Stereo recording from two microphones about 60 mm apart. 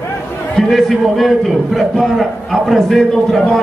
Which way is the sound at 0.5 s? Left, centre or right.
Centre.